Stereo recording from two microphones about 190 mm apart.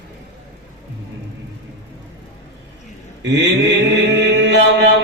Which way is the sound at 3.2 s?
65° right (ahead or behind).